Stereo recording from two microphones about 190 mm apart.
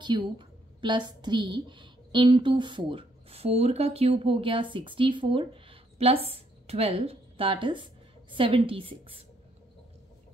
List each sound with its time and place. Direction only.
0.0 s a woman's voice: 25° right (ahead or behind)